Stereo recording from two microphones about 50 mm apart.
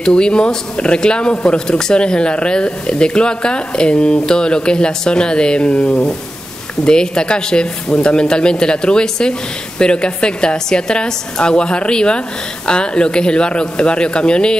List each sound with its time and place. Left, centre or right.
0.0 s speech: centre
6.8 s speech: centre